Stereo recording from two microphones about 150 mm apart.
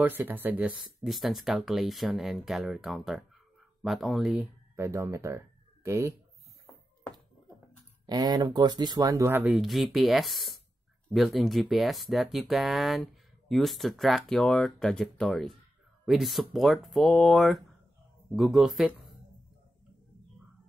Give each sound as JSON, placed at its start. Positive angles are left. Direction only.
{"t": 0.0, "sound": "speech", "side_deg": -15}
{"t": 4.7, "sound": "speech", "side_deg": -15}
{"t": 8.1, "sound": "speech", "side_deg": -25}
{"t": 9.4, "sound": "speech", "side_deg": 0}